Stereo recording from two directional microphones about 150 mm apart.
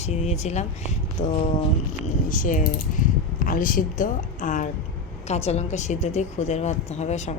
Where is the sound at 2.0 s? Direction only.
60° left (ahead or behind).